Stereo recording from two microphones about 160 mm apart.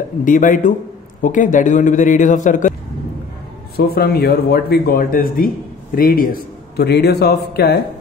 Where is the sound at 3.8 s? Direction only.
75° left (ahead or behind).